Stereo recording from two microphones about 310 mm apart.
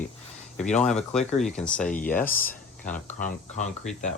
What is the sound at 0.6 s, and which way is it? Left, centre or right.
Speech, left.